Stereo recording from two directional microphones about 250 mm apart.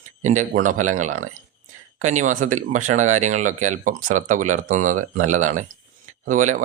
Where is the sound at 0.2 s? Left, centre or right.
Right.